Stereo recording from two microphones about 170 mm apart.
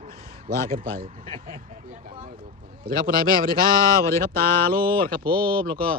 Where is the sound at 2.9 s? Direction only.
25° left (ahead or behind).